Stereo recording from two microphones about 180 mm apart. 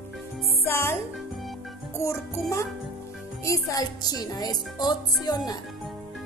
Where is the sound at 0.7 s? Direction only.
15° left (ahead or behind).